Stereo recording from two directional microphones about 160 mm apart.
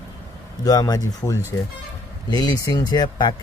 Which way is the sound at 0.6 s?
25° left (ahead or behind).